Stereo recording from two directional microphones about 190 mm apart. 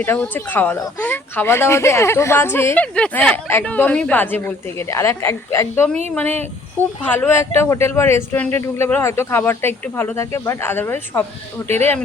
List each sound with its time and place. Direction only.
0.0 s speech: 10° left (ahead or behind)